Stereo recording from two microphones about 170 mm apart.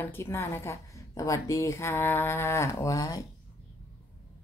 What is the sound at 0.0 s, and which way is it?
A woman's voice, 15° left (ahead or behind).